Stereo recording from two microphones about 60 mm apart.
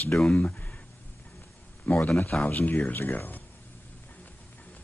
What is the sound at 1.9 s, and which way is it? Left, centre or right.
Speech, left.